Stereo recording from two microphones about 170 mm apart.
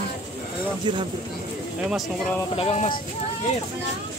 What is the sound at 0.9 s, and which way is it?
Speech, 30° right (ahead or behind).